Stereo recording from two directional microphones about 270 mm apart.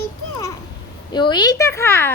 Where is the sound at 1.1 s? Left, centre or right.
Centre.